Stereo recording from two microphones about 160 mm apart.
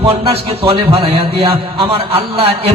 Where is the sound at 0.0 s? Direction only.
35° right (ahead or behind).